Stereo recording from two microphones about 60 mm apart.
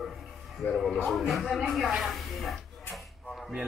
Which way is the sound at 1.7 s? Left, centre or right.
Centre.